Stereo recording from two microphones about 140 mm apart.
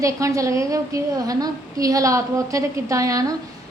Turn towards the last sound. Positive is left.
turn(degrees=-25)  # may be behind; listen again after turning